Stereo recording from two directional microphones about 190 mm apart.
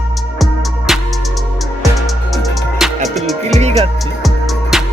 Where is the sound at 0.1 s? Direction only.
Centre (ahead or behind).